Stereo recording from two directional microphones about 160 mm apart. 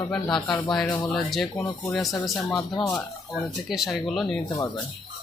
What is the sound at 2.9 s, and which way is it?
Speech, centre (ahead or behind).